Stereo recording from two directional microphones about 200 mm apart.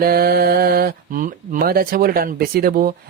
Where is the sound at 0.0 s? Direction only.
50° right (ahead or behind).